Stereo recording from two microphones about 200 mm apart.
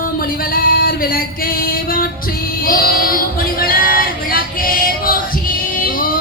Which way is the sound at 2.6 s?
45° left (ahead or behind).